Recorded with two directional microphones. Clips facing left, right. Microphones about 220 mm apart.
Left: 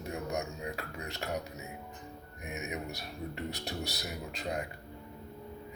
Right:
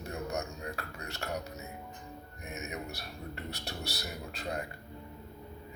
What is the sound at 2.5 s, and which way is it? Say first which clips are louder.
Speech: left 2 dB; 15° left (ahead or behind).